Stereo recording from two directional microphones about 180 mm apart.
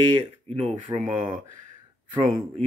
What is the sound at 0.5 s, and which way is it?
Speech, 35° right (ahead or behind).